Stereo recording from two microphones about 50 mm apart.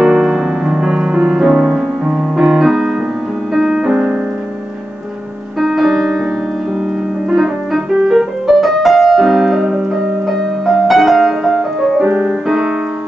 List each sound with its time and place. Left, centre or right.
0.0 s music: centre
2.0 s piano: centre
3.5 s music: centre
5.6 s music: centre
7.2 s piano: centre
8.1 s music: centre
10.2 s music: centre
12.4 s piano: centre